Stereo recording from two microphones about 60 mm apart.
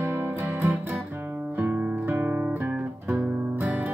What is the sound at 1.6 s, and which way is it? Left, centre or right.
Music, right.